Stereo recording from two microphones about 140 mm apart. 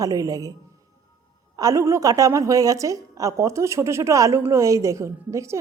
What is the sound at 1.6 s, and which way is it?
A woman's voice, 25° right (ahead or behind).